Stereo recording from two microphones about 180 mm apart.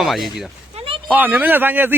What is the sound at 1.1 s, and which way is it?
Speech, 10° right (ahead or behind).